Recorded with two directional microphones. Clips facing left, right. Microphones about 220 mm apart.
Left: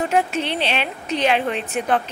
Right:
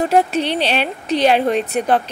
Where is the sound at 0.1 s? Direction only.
35° right (ahead or behind).